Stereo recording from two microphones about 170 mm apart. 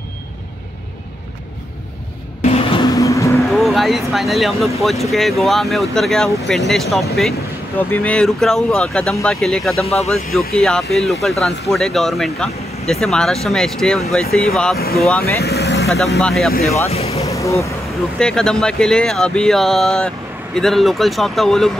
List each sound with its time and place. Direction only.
2.4 s vehicle: 35° left (ahead or behind)
3.0 s vehicle: 20° left (ahead or behind)
3.5 s speech: centre (ahead or behind)
9.8 s speech: 40° left (ahead or behind)
10.5 s speech: centre (ahead or behind)
15.4 s vehicle: 70° left (ahead or behind)
16.2 s speech: 5° left (ahead or behind)
16.9 s speech: 35° left (ahead or behind)
17.3 s speech: 20° left (ahead or behind)
18.2 s speech: 5° left (ahead or behind)